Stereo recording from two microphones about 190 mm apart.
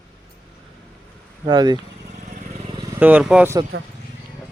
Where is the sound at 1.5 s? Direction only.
20° right (ahead or behind).